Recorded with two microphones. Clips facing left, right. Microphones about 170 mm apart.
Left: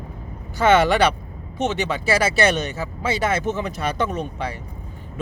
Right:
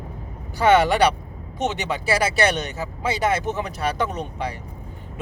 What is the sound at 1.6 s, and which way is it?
Speech, 15° right (ahead or behind).